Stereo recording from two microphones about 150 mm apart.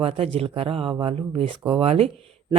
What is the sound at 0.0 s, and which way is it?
A woman's voice, 40° right (ahead or behind).